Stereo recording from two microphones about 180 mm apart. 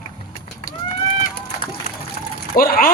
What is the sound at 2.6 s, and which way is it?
Speech, 55° left (ahead or behind).